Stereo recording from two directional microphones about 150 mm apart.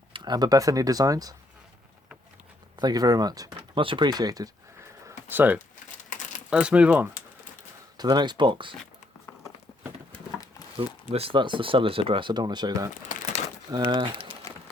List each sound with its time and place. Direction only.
0.1 s speech: 30° right (ahead or behind)
2.7 s speech: 25° right (ahead or behind)
3.8 s a sound: 35° right (ahead or behind); by 5.5 s 10° right (ahead or behind)
6.5 s speech: 10° right (ahead or behind)
7.9 s speech: 30° right (ahead or behind)
11.1 s speech: 40° right (ahead or behind)